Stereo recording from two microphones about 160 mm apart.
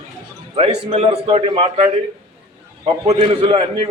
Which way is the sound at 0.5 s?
40° right (ahead or behind).